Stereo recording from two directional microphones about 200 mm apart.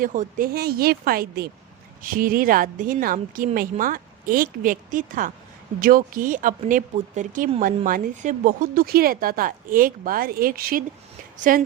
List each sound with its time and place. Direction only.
0.0 s a woman's voice: 40° right (ahead or behind)